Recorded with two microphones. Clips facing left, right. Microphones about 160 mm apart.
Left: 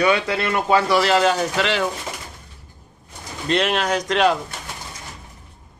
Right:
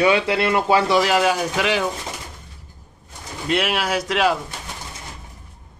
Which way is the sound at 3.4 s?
5° right (ahead or behind).